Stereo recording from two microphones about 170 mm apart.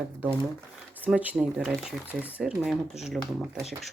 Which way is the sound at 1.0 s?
10° right (ahead or behind).